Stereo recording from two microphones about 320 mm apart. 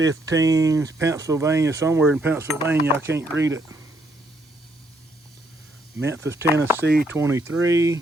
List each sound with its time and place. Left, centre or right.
0.0 s speech: centre
3.1 s speech: right
6.0 s speech: centre
6.8 s speech: right
7.2 s speech: centre